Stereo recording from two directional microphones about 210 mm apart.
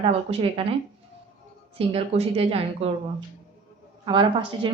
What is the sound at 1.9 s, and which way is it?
Speech, 25° right (ahead or behind).